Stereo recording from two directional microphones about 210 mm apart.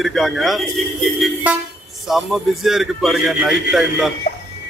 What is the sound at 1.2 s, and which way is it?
Vehicle, 5° right (ahead or behind).